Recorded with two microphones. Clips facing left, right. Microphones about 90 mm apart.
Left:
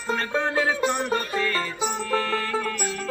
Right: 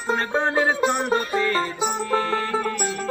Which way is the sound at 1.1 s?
25° right (ahead or behind).